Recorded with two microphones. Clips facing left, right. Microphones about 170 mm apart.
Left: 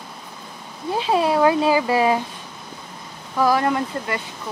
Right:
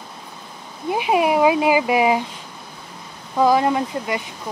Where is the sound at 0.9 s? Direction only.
15° right (ahead or behind).